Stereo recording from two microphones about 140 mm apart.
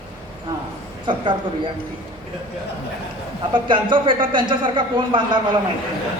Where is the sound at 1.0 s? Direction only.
35° right (ahead or behind).